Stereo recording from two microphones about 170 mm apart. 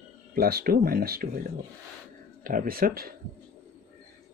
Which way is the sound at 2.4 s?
60° right (ahead or behind).